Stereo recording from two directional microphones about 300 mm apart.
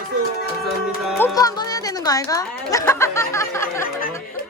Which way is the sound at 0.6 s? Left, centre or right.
Centre.